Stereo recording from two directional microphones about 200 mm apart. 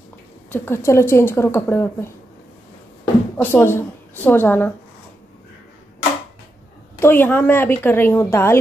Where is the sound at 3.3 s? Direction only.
10° left (ahead or behind).